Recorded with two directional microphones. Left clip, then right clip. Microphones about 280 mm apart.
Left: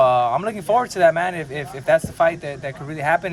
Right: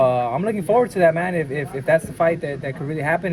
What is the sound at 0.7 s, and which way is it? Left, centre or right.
Speech, centre.